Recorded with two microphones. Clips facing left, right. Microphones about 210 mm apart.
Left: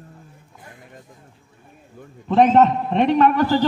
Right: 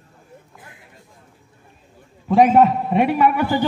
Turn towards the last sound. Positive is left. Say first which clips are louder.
# left 1 dB
turn(degrees=-10)  # may be behind; listen again after turning